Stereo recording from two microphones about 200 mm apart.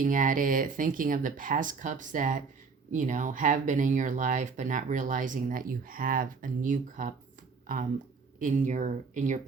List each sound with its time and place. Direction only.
0.0 s speech: 40° right (ahead or behind)
8.4 s speech: 40° right (ahead or behind)